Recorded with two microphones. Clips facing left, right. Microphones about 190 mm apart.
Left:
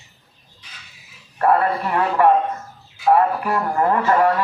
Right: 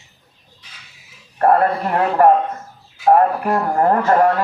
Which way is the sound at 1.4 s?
40° right (ahead or behind).